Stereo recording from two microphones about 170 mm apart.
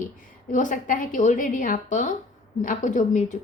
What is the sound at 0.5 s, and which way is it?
A woman's voice, 50° left (ahead or behind).